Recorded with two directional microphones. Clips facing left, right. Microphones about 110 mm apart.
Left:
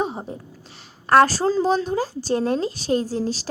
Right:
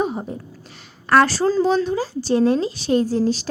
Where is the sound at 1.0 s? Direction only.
40° left (ahead or behind).